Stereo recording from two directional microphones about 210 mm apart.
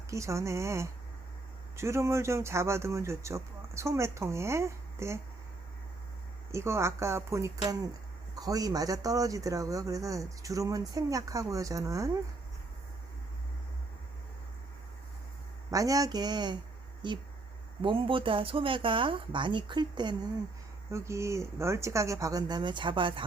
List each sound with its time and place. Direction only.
0.1 s speech: 15° right (ahead or behind)
6.5 s speech: 15° right (ahead or behind)
15.7 s speech: 15° right (ahead or behind)